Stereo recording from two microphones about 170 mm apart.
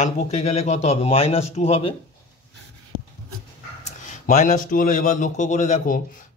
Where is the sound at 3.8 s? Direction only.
50° left (ahead or behind).